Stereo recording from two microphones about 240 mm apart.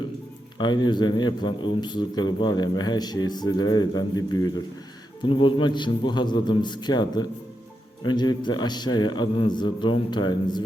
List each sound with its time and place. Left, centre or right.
0.6 s a man's voice: centre